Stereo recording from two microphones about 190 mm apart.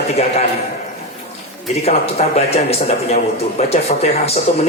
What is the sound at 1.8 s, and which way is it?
A man's voice, 35° left (ahead or behind).